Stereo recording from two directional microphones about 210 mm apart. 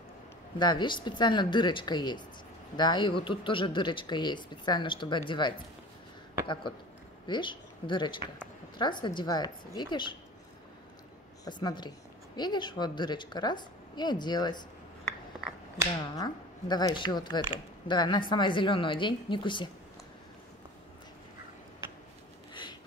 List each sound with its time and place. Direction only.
0.6 s speech: 20° left (ahead or behind)
11.4 s speech: 20° left (ahead or behind)
16.2 s speech: 20° left (ahead or behind)
22.5 s a sound: 20° left (ahead or behind)